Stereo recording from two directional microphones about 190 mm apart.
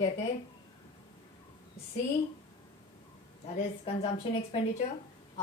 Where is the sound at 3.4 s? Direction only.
35° left (ahead or behind).